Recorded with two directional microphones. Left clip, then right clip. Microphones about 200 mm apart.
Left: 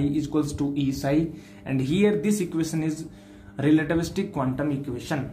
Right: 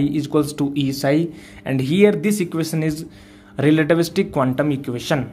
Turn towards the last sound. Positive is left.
turn(degrees=-45)  # may be behind; listen again after turning